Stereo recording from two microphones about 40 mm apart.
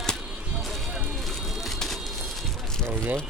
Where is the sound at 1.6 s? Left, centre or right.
Centre.